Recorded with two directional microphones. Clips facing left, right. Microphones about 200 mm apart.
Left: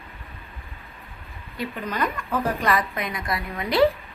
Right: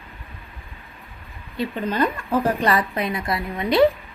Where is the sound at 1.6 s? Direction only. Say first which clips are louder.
Right 5 dB; 30° right (ahead or behind).